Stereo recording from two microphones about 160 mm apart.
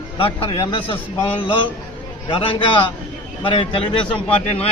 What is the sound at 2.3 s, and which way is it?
A man's voice, 30° left (ahead or behind).